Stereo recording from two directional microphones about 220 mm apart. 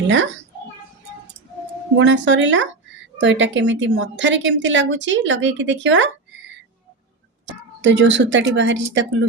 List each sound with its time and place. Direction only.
2.0 s a woman's voice: 55° right (ahead or behind)
7.8 s a woman's voice: 55° right (ahead or behind)